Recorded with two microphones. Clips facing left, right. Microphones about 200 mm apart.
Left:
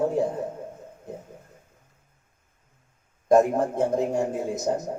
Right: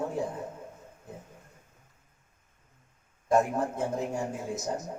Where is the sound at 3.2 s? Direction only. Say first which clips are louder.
Left 7 dB; 40° left (ahead or behind).